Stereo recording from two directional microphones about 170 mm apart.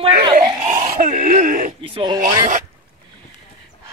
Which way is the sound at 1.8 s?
30° right (ahead or behind).